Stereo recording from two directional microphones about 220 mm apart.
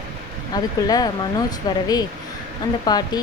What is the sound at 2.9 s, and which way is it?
Speech, 20° left (ahead or behind).